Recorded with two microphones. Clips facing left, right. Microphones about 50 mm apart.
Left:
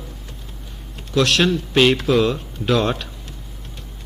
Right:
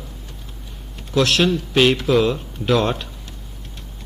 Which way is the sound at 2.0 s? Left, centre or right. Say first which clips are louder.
Even; centre.